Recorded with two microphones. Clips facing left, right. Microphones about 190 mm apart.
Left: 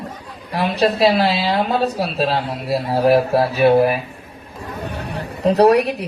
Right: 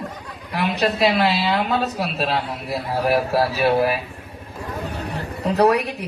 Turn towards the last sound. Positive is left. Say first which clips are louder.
# left 4 dB
turn(degrees=35)  # may be behind; listen again after turning